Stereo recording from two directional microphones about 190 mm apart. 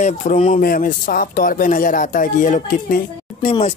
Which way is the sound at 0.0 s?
40° left (ahead or behind).